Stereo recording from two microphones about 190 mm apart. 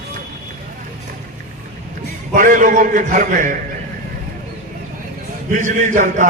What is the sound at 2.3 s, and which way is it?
A man's voice, 45° right (ahead or behind).